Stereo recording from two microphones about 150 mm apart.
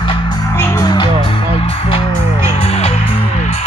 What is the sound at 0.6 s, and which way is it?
Music, 20° left (ahead or behind).